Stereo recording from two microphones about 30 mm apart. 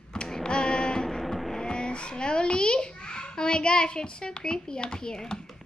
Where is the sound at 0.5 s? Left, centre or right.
Left.